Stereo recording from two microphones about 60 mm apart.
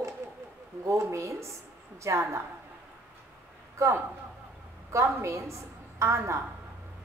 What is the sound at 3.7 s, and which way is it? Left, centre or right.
A man's voice, right.